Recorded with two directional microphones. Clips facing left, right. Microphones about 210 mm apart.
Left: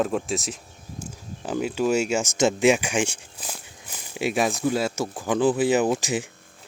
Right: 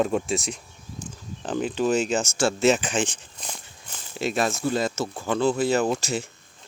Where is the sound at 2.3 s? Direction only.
15° left (ahead or behind).